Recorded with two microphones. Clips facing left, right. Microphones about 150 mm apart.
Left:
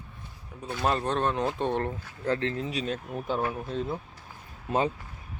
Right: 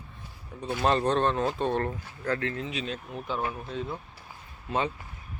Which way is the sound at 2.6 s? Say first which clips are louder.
Left 3 dB; 40° left (ahead or behind).